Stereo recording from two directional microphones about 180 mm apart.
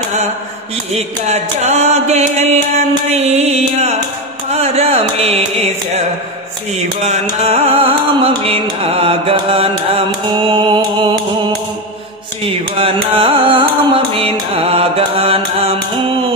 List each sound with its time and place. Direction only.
0.9 s music: 40° right (ahead or behind)
7.1 s music: 40° right (ahead or behind)
12.4 s music: 30° right (ahead or behind)